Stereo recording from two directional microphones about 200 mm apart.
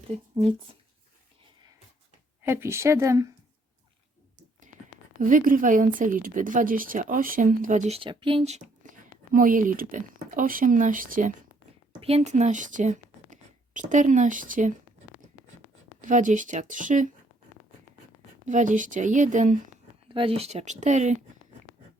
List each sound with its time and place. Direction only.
0.3 s speech: 25° right (ahead or behind)
2.4 s a woman's voice: 10° right (ahead or behind)
4.7 s whispering: 40° right (ahead or behind)
5.2 s a woman's voice: 45° right (ahead or behind)
11.9 s speech: 30° right (ahead or behind)
16.0 s speech: 40° right (ahead or behind)
18.4 s speech: 40° right (ahead or behind)
20.1 s speech: 25° right (ahead or behind)